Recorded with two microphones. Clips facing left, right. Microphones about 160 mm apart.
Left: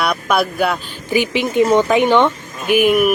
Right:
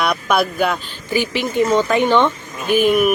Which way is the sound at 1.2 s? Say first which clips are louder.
Left 3 dB; 15° left (ahead or behind).